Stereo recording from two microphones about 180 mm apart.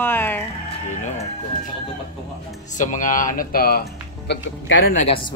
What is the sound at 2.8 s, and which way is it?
Speech, 45° left (ahead or behind).